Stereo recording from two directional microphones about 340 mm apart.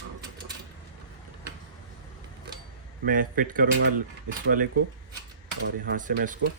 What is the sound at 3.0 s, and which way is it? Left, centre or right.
Speech, right.